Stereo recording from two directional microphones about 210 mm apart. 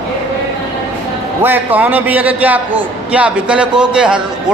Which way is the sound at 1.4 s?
10° right (ahead or behind).